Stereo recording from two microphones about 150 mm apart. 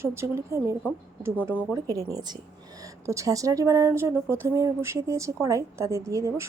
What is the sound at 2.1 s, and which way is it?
A woman's voice, 25° right (ahead or behind).